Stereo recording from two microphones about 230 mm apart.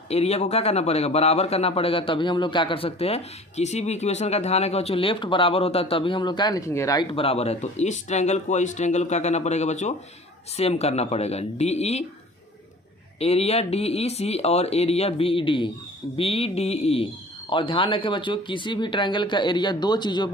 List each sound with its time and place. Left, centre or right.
0.1 s a man's voice: left
13.1 s a man's voice: left